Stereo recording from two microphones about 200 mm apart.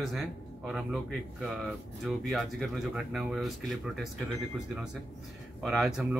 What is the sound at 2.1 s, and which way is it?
Speech, centre (ahead or behind).